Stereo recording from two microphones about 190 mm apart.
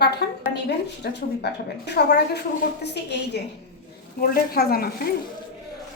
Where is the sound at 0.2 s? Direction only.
60° left (ahead or behind).